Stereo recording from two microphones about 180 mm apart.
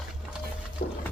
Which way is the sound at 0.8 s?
60° left (ahead or behind).